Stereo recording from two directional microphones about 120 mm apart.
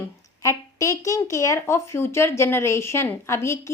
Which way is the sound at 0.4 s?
25° left (ahead or behind).